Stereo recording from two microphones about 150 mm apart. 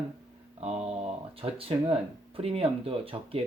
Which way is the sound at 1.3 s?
40° right (ahead or behind).